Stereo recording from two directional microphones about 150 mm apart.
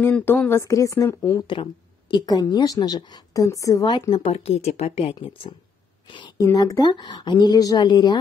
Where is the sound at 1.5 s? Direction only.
30° left (ahead or behind).